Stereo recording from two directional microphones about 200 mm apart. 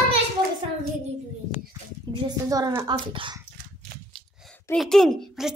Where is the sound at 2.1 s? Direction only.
20° right (ahead or behind).